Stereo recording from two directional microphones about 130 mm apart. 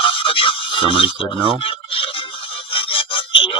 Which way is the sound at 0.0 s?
40° left (ahead or behind).